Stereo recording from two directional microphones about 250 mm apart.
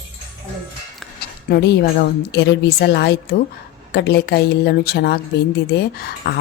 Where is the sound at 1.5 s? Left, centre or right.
Left.